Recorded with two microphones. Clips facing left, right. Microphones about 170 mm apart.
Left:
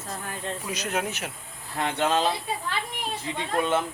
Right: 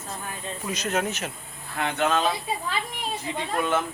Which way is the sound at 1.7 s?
35° left (ahead or behind).